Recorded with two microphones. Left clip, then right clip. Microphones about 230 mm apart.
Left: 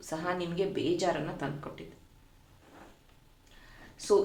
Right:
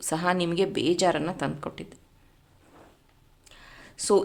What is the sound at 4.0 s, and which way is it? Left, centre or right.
Speech, right.